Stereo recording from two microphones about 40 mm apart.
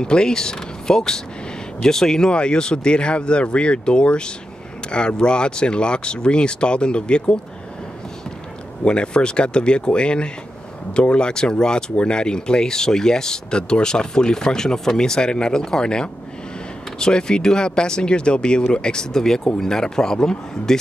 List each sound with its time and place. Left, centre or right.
0.0 s speech: centre
8.8 s speech: left